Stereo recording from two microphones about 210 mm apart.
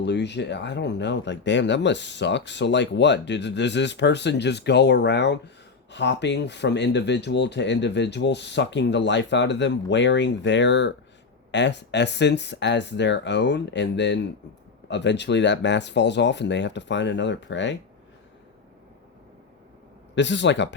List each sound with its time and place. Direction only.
0.0 s speech: 55° left (ahead or behind)
20.1 s speech: 60° left (ahead or behind)